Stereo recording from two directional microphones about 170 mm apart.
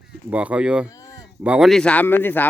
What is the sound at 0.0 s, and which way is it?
Speech, 10° right (ahead or behind).